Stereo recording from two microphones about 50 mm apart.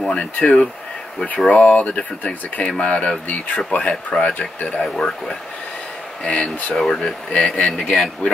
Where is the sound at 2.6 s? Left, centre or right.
Left.